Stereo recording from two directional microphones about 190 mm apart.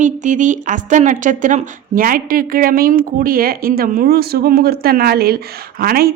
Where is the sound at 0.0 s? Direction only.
40° right (ahead or behind).